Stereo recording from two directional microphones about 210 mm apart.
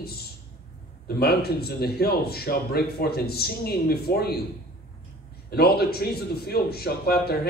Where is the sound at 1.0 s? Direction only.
50° left (ahead or behind).